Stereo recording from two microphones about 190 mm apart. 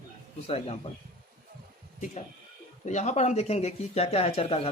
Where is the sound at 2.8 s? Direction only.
40° left (ahead or behind).